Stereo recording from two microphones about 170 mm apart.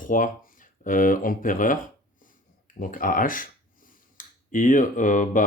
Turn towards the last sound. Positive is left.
turn(degrees=50)  # may be behind; listen again after turning